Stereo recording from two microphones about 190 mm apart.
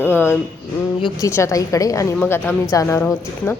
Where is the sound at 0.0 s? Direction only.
10° left (ahead or behind).